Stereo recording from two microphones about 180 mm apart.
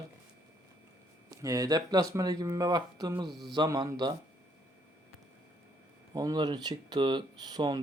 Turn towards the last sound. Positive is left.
turn(degrees=-25)  # may be behind; listen again after turning